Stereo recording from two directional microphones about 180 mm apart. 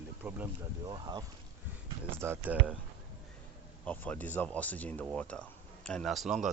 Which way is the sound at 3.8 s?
10° left (ahead or behind).